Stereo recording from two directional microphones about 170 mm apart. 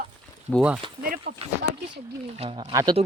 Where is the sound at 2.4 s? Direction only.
30° right (ahead or behind).